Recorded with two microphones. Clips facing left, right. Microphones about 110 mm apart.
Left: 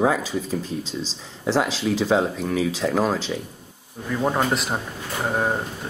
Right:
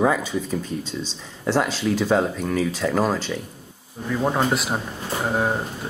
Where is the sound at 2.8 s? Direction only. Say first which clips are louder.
Even; 20° left (ahead or behind).